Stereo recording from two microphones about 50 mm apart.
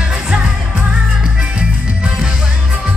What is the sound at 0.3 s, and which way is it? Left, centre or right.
Music, right.